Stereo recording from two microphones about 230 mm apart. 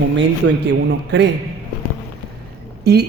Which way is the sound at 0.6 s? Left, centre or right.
Right.